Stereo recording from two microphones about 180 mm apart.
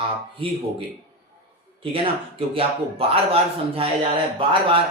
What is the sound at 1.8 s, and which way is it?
Speech, 30° right (ahead or behind).